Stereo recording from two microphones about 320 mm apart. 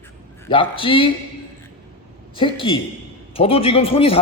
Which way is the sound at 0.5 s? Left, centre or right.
Centre.